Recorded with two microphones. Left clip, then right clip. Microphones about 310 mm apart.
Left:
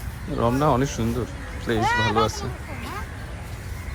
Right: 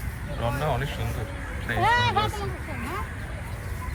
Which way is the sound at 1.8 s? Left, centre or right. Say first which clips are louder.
Even; right.